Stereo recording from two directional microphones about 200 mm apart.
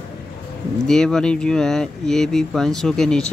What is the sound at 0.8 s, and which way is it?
Speech, 5° left (ahead or behind).